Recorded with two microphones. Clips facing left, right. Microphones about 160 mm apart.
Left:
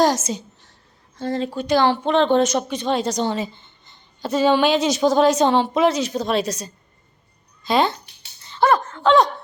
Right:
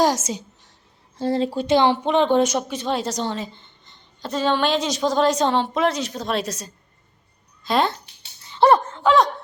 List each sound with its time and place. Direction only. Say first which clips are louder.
0.0 s a woman's voice: left 1 dB; 10° right (ahead or behind)
1.1 s speech: right 2 dB; 30° right (ahead or behind); by 7.9 s centre (ahead or behind)
8.5 s gasp: right 2 dB; 30° right (ahead or behind)
9.0 s speech: left 2 dB; centre (ahead or behind)